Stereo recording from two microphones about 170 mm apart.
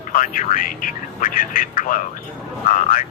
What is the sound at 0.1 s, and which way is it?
Speech, 50° left (ahead or behind).